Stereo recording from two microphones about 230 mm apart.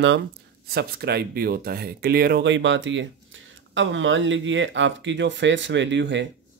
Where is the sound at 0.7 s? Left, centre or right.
Right.